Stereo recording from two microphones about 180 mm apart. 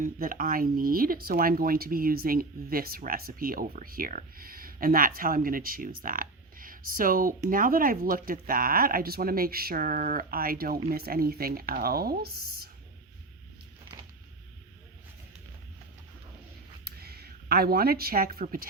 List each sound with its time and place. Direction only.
0.0 s speech: 50° right (ahead or behind)
16.8 s speech: 60° right (ahead or behind)